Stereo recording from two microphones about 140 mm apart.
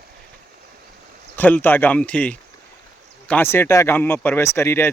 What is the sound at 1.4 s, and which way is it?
Speech, 10° left (ahead or behind).